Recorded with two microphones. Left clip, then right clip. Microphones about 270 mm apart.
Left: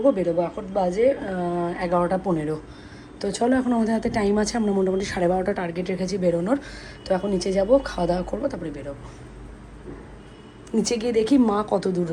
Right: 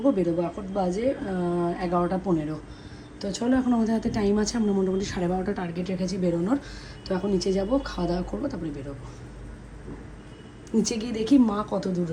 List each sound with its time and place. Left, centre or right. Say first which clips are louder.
0.0 s a woman's voice: left 4 dB; right
10.7 s a woman's voice: left 4 dB; centre